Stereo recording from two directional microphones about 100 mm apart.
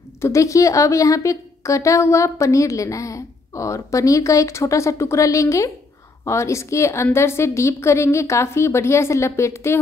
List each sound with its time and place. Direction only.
0.2 s a woman's voice: 30° left (ahead or behind)